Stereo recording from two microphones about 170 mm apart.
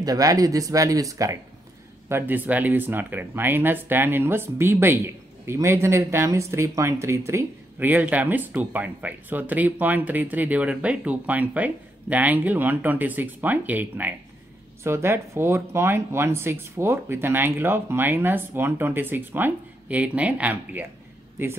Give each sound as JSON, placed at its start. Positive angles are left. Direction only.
{"t": 0.0, "sound": "speech", "side_deg": -20}